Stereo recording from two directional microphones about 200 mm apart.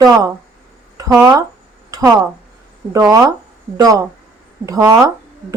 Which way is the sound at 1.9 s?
15° right (ahead or behind).